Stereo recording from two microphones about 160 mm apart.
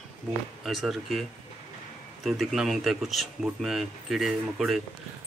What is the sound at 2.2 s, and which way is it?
Speech, centre (ahead or behind).